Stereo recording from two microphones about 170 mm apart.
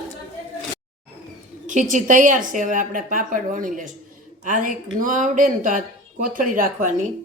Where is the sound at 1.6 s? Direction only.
45° right (ahead or behind).